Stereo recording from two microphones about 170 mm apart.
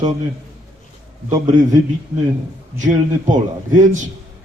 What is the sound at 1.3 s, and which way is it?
A man's voice, 45° right (ahead or behind).